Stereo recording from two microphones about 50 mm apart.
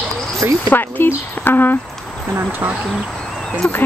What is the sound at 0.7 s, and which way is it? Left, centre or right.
Speech, left.